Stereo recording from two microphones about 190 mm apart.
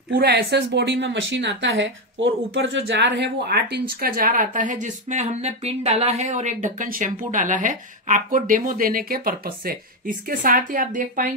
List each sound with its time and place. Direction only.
0.1 s speech: 60° right (ahead or behind); by 11.2 s 45° right (ahead or behind)